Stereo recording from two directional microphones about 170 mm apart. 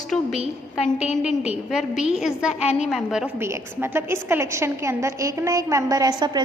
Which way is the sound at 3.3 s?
15° right (ahead or behind).